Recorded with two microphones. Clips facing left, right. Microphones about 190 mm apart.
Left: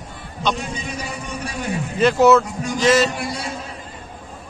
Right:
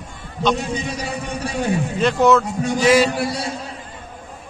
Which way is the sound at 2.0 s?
5° left (ahead or behind).